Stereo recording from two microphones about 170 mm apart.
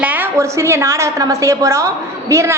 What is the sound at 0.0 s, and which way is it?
A woman's voice, 10° right (ahead or behind).